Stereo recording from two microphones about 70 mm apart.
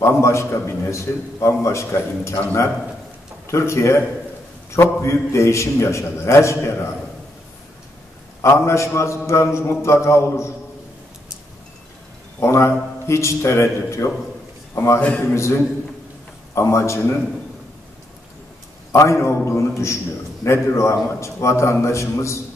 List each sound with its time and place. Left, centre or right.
0.0 s a man's voice: left
3.4 s a man's voice: left
5.0 s a man's voice: left
8.4 s a man's voice: left
12.4 s a man's voice: left
15.0 s a man's voice: centre
15.3 s a man's voice: left
18.9 s a man's voice: left